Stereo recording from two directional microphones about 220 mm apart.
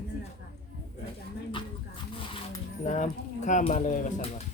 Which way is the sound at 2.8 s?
35° left (ahead or behind).